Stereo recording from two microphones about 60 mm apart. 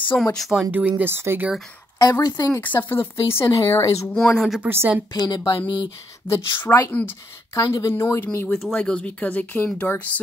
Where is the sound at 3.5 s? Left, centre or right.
Left.